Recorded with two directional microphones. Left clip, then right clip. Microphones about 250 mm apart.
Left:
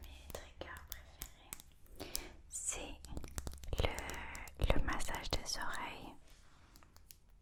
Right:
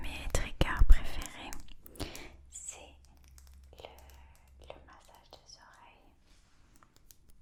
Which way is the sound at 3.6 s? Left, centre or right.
Left.